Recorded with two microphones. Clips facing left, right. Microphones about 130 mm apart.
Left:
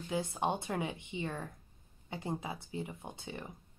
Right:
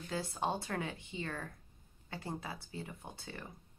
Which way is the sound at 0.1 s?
20° left (ahead or behind).